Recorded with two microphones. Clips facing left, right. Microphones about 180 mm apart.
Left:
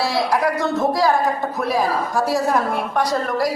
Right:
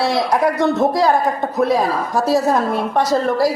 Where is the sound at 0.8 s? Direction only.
20° right (ahead or behind).